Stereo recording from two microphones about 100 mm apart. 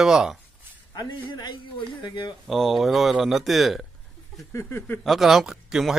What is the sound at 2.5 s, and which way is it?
A man's voice, centre (ahead or behind).